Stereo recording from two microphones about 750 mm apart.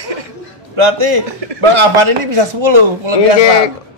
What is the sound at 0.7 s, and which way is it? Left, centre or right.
Speech, right.